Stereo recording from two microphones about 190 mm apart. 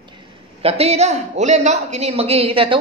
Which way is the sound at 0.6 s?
35° right (ahead or behind).